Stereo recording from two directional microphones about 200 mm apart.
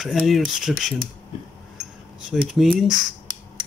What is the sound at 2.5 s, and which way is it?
Speech, centre (ahead or behind).